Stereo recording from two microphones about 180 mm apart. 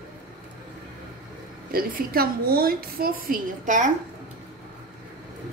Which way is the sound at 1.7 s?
55° right (ahead or behind).